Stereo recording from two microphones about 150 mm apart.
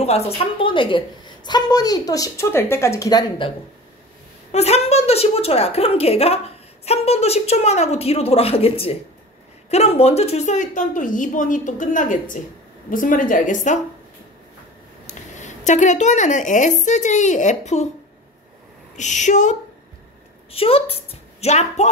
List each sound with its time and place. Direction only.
0.0 s a woman's voice: 45° left (ahead or behind)
4.5 s a woman's voice: 45° left (ahead or behind)
15.0 s speech: 55° left (ahead or behind)
18.9 s a woman's voice: 55° left (ahead or behind)
20.5 s a woman's voice: 40° left (ahead or behind)